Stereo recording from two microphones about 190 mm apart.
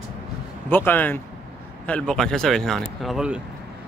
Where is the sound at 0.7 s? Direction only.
10° left (ahead or behind).